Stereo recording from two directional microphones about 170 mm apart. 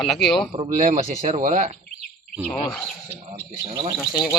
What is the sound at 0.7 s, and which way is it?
Speech, 50° right (ahead or behind).